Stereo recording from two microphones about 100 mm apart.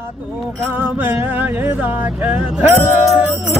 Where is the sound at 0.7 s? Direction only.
20° right (ahead or behind).